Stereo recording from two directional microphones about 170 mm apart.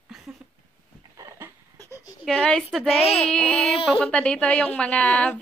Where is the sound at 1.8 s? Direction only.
15° left (ahead or behind).